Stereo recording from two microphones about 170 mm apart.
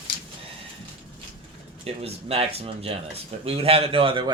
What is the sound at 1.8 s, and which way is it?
Speech, 35° right (ahead or behind).